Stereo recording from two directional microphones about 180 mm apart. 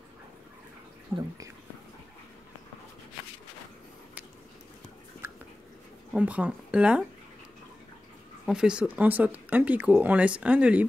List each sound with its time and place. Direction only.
1.1 s speech: 15° right (ahead or behind)
6.1 s speech: 5° right (ahead or behind)
8.5 s speech: 5° right (ahead or behind)